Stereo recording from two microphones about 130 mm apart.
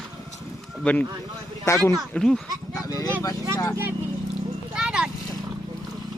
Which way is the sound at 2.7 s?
25° left (ahead or behind).